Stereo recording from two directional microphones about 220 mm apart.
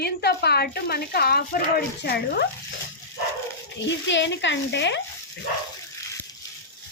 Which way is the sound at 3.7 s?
55° left (ahead or behind).